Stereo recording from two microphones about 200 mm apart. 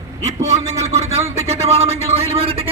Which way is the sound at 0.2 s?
35° right (ahead or behind).